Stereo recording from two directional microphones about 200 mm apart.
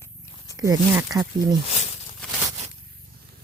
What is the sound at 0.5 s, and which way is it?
Speech, 15° right (ahead or behind).